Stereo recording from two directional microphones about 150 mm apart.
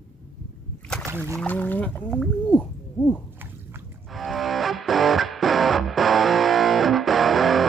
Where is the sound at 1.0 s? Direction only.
20° right (ahead or behind).